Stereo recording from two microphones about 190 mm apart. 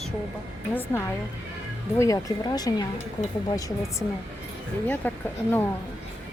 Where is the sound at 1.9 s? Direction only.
15° left (ahead or behind).